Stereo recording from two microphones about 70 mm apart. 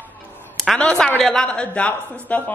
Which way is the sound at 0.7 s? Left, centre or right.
Centre.